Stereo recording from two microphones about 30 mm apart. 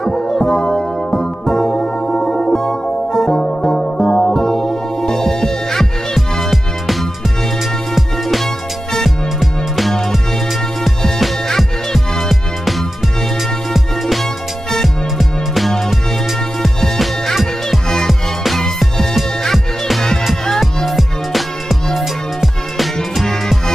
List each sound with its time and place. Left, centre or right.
0.0 s music: centre
6.5 s music: centre
9.4 s music: centre
11.4 s music: centre
12.3 s music: centre
17.6 s music: centre
19.4 s music: centre